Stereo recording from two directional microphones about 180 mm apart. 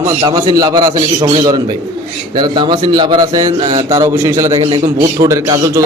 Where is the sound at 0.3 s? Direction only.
20° right (ahead or behind).